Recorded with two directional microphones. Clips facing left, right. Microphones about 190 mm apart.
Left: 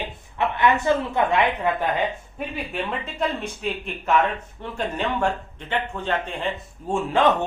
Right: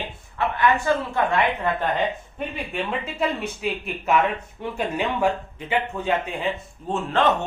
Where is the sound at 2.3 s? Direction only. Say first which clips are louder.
Even; centre (ahead or behind).